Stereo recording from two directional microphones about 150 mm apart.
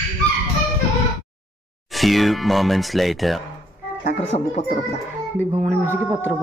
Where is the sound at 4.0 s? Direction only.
50° left (ahead or behind).